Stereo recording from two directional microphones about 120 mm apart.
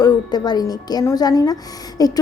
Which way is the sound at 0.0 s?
35° left (ahead or behind).